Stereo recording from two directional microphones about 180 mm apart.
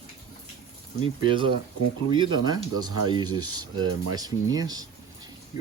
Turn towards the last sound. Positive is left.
turn(degrees=-20)  # may be behind; listen again after turning